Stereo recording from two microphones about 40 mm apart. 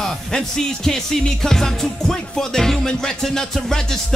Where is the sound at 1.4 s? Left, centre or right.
Centre.